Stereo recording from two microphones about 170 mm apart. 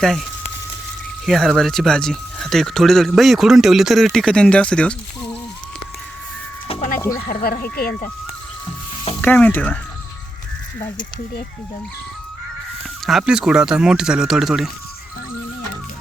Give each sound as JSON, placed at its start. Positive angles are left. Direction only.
{"t": 0.0, "sound": "speech", "side_deg": 0}
{"t": 6.7, "sound": "music", "side_deg": 35}
{"t": 7.4, "sound": "speech", "side_deg": 60}
{"t": 9.2, "sound": "speech", "side_deg": 10}
{"t": 13.1, "sound": "speech", "side_deg": -5}